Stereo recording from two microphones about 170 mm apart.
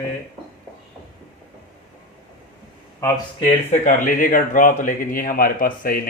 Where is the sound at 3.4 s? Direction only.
40° left (ahead or behind); by 6.0 s 55° left (ahead or behind).